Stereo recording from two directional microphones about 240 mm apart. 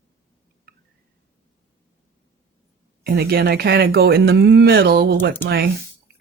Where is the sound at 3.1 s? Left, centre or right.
Right.